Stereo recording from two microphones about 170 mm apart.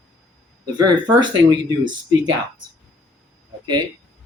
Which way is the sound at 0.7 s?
25° right (ahead or behind).